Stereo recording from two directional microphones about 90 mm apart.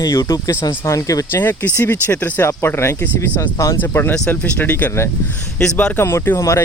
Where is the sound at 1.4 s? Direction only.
25° left (ahead or behind).